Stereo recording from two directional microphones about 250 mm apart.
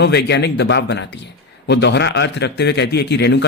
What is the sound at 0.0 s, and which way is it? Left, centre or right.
A man's voice, left.